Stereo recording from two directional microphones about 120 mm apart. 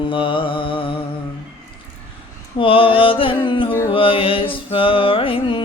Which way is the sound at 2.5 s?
50° left (ahead or behind).